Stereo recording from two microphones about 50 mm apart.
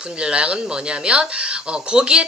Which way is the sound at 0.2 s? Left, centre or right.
Centre.